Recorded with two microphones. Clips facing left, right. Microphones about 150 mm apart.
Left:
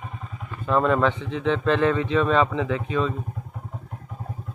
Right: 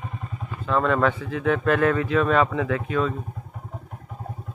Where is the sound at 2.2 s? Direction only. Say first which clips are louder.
Even; 5° right (ahead or behind).